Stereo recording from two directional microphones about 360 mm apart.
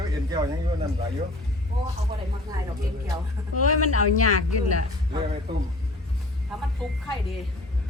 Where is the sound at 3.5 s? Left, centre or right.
Left.